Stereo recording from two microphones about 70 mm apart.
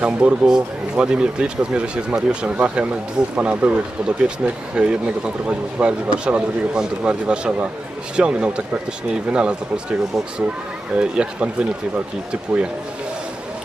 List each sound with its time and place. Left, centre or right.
0.0 s speech: centre